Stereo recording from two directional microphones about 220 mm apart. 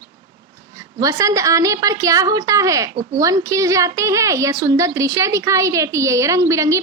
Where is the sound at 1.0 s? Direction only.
15° right (ahead or behind).